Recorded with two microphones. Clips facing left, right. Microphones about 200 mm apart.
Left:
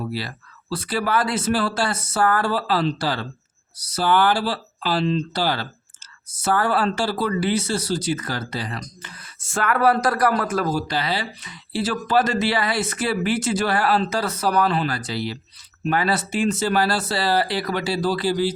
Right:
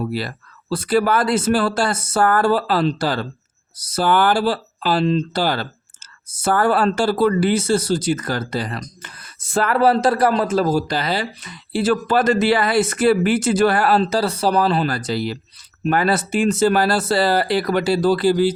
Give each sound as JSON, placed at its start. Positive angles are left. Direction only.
{"t": 0.1, "sound": "speech", "side_deg": -50}
{"t": 10.7, "sound": "speech", "side_deg": -40}